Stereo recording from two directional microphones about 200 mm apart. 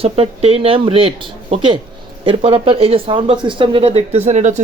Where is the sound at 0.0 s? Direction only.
30° right (ahead or behind).